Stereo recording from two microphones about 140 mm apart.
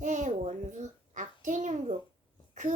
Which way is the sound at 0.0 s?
60° right (ahead or behind).